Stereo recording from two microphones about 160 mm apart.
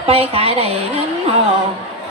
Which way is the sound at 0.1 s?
40° right (ahead or behind).